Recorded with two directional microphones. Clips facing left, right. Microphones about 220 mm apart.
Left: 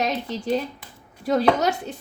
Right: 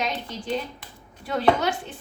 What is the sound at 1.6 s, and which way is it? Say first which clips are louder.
Speech: left 3 dB; 40° left (ahead or behind).